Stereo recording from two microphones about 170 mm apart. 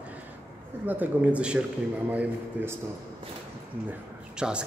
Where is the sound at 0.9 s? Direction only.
10° right (ahead or behind).